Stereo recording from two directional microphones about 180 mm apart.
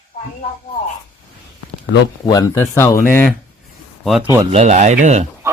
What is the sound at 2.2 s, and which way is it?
Speech, 20° left (ahead or behind).